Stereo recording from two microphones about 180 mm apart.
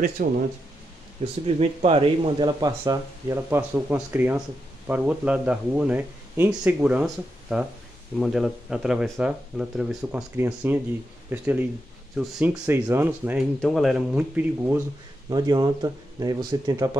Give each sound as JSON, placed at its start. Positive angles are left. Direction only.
{"t": 0.2, "sound": "speech", "side_deg": -50}
{"t": 1.2, "sound": "speech", "side_deg": -35}
{"t": 13.6, "sound": "speech", "side_deg": 0}
{"t": 15.2, "sound": "speech", "side_deg": -20}